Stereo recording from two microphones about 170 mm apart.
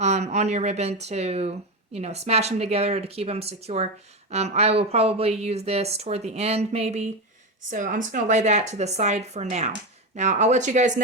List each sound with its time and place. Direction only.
0.0 s speech: 40° right (ahead or behind)
7.7 s speech: 50° right (ahead or behind)